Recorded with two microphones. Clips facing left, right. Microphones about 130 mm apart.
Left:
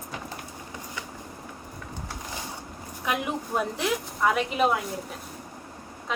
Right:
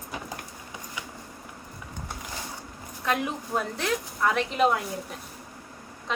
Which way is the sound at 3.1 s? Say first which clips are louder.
Even; 10° left (ahead or behind).